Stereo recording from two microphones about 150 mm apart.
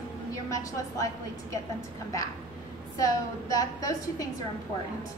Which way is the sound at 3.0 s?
25° left (ahead or behind).